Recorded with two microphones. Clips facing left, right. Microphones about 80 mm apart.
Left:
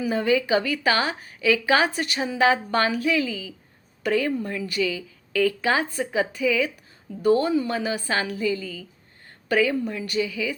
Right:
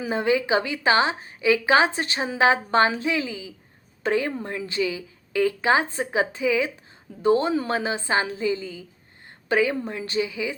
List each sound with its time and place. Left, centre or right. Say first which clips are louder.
0.0 s a woman's voice: left 1 dB; right